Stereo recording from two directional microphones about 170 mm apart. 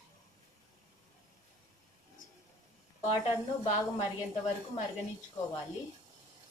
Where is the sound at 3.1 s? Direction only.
35° left (ahead or behind).